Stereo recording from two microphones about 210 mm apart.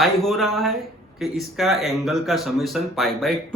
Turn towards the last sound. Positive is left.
turn(degrees=0)  # may be behind; listen again after turning